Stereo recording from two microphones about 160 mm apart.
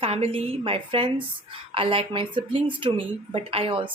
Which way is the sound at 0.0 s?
35° right (ahead or behind).